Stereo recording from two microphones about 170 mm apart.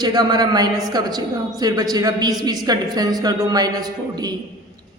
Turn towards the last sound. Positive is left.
turn(degrees=-25)  # may be behind; listen again after turning